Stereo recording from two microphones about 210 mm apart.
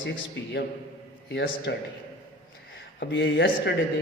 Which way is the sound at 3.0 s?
55° left (ahead or behind).